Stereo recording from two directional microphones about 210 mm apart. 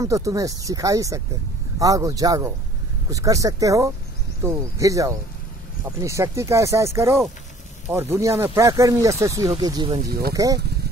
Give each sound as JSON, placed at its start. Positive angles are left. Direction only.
{"t": 0.0, "sound": "speech", "side_deg": -15}
{"t": 10.0, "sound": "speech", "side_deg": -45}
{"t": 10.3, "sound": "speech", "side_deg": -15}